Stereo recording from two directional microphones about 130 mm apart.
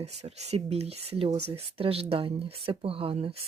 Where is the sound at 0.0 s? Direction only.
55° right (ahead or behind).